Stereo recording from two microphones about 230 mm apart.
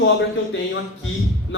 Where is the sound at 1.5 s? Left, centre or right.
Left.